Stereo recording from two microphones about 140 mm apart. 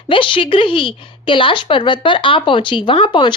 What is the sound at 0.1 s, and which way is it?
A woman's voice, 35° left (ahead or behind).